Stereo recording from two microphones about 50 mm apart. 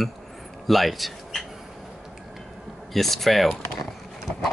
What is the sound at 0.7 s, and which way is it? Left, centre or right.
Speech, centre.